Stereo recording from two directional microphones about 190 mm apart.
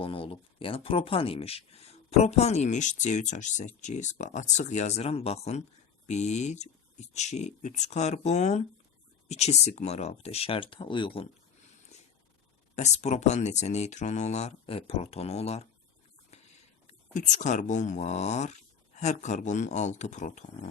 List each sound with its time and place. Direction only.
0.0 s speech: 30° left (ahead or behind)
12.7 s speech: 35° left (ahead or behind)
16.8 s speech: 40° left (ahead or behind)